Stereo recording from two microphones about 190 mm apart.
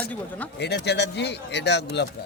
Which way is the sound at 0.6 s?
60° left (ahead or behind).